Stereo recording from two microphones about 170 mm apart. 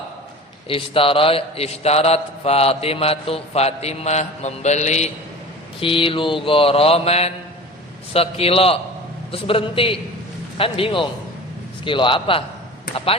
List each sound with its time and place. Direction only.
0.7 s a man's voice: 30° left (ahead or behind)